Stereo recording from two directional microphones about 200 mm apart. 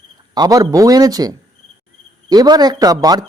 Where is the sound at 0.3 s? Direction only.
20° right (ahead or behind).